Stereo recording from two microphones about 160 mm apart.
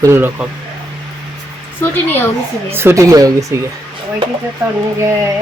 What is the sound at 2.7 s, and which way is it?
Speech, 15° right (ahead or behind).